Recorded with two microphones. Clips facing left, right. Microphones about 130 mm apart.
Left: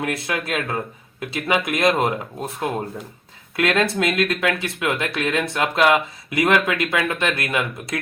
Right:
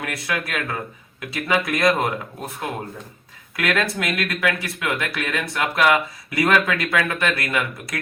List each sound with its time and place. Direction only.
0.0 s speech: 25° left (ahead or behind)